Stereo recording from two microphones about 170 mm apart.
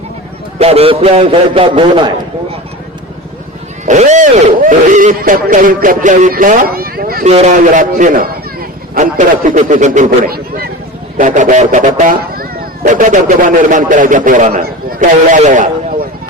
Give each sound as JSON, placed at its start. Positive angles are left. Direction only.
{"t": 0.6, "sound": "a man's voice", "side_deg": -35}
{"t": 3.8, "sound": "speech", "side_deg": -45}
{"t": 7.3, "sound": "speech", "side_deg": -45}
{"t": 11.2, "sound": "a man's voice", "side_deg": -50}
{"t": 12.8, "sound": "speech", "side_deg": -45}